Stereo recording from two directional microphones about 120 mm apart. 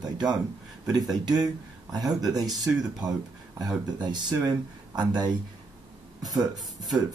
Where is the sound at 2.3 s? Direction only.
30° right (ahead or behind).